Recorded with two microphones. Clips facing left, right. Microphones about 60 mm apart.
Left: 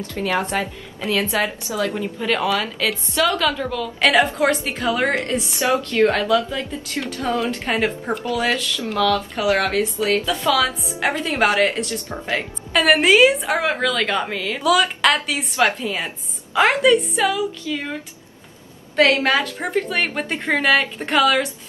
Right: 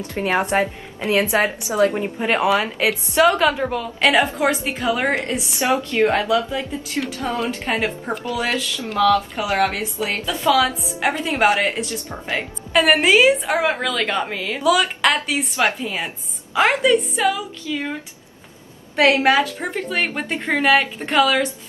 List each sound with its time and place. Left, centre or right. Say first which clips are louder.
0.0 s a woman's voice: right 2 dB; right
4.0 s a woman's voice: left 1 dB; centre
18.9 s a woman's voice: right 1 dB; centre